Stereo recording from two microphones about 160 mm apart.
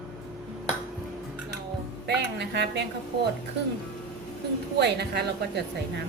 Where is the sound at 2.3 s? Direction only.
90° right.